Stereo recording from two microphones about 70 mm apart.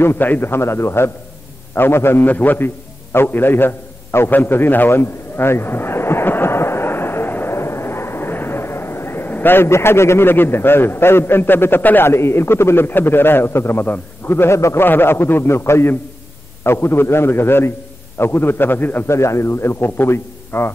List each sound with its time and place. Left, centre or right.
0.0 s a man's voice: left
19.0 s a man's voice: left